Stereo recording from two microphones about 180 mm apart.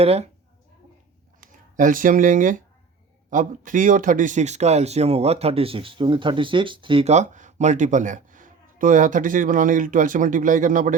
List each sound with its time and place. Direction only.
0.0 s speech: 35° right (ahead or behind)
1.4 s speech: 50° right (ahead or behind)